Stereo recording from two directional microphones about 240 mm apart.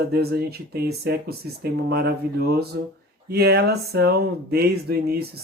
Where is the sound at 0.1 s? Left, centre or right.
Right.